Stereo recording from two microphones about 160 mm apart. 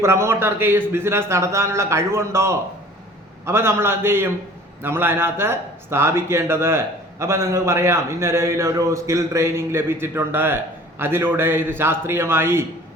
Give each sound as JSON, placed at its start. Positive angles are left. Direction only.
{"t": 0.0, "sound": "speech", "side_deg": -15}